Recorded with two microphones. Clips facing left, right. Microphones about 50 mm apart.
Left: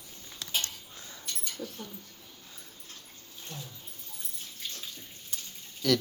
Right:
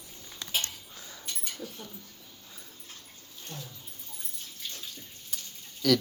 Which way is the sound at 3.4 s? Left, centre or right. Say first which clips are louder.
Right 1 dB; centre.